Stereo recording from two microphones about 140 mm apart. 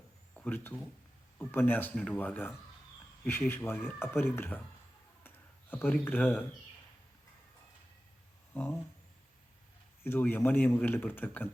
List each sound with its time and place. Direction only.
0.3 s speech: 10° left (ahead or behind)
5.7 s speech: 10° left (ahead or behind)
10.0 s speech: 15° left (ahead or behind)